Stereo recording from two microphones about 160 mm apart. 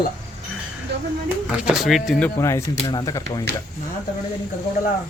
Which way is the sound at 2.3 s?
20° left (ahead or behind).